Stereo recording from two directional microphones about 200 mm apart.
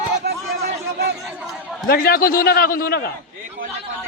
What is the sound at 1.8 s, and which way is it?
A man's voice, 45° left (ahead or behind).